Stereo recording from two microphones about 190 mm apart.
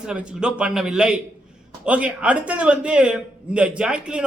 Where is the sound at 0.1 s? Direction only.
5° right (ahead or behind).